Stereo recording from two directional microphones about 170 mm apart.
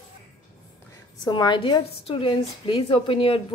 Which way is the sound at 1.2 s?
25° left (ahead or behind).